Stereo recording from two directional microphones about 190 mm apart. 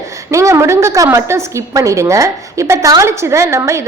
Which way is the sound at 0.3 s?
15° right (ahead or behind).